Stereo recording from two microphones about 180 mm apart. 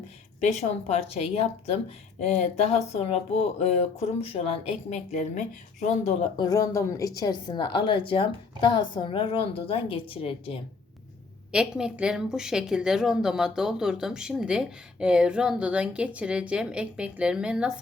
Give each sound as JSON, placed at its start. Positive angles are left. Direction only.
{"t": 0.3, "sound": "speech", "side_deg": 40}
{"t": 6.3, "sound": "a woman's voice", "side_deg": 20}
{"t": 11.5, "sound": "speech", "side_deg": -5}